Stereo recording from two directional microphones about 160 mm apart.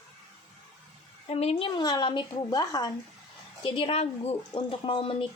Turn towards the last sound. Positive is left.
turn(degrees=35)  # may be behind; listen again after turning